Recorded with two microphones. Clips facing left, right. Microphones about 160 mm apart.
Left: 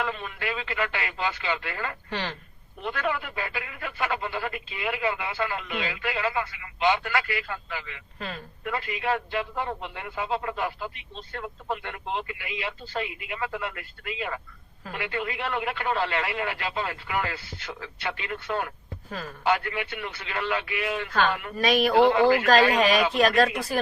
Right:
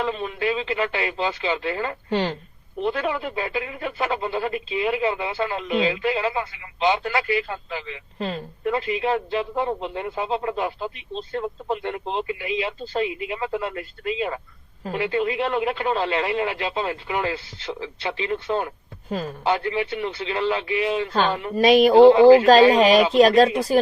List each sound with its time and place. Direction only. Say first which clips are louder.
0.0 s speech: right 6 dB; 25° right (ahead or behind)